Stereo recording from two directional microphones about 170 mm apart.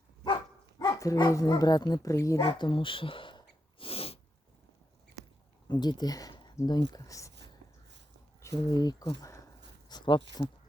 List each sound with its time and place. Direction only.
0.8 s speech: 20° left (ahead or behind)
3.8 s sneeze: 35° left (ahead or behind)
5.6 s speech: 25° left (ahead or behind)
8.4 s speech: 20° left (ahead or behind)